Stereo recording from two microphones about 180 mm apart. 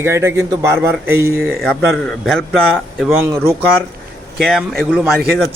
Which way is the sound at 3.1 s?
15° right (ahead or behind).